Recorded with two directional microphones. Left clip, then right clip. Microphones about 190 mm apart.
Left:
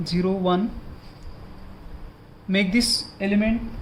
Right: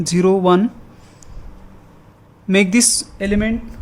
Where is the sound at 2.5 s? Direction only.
40° right (ahead or behind).